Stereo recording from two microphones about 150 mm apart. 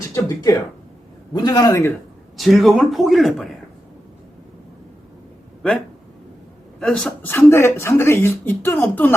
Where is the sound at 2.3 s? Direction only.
Centre (ahead or behind).